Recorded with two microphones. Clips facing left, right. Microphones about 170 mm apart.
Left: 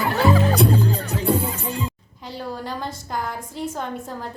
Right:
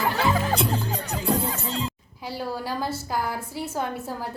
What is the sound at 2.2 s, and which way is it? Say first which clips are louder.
A woman's voice: even; 10° right (ahead or behind).